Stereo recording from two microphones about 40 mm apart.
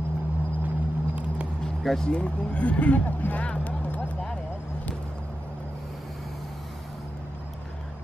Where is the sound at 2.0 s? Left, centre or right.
Left.